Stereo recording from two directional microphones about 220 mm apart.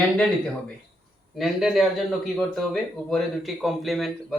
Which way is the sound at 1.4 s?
Centre (ahead or behind).